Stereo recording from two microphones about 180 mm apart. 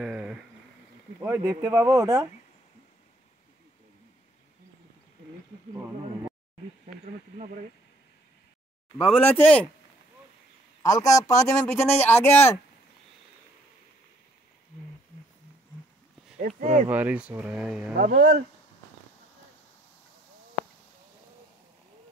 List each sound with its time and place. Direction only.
0.0 s insect: 5° right (ahead or behind)
1.2 s speech: 15° right (ahead or behind)
9.0 s speech: 5° left (ahead or behind)
10.8 s a man's voice: 20° left (ahead or behind)
16.3 s speech: 50° right (ahead or behind)
16.9 s speech: 10° right (ahead or behind)
18.0 s speech: 45° right (ahead or behind)